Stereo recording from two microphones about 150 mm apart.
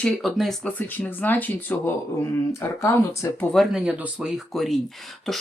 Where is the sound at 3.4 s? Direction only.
Centre (ahead or behind).